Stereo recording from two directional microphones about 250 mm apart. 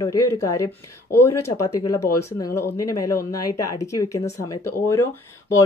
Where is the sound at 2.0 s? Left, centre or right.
Centre.